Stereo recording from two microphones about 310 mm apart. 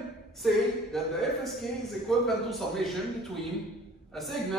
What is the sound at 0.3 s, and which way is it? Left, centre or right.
A man's voice, centre.